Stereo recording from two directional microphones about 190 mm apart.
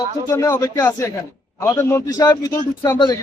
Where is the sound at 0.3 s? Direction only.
15° left (ahead or behind).